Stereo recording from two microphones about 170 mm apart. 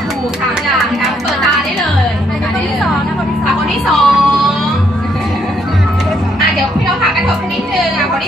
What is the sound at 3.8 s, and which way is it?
Music, centre (ahead or behind).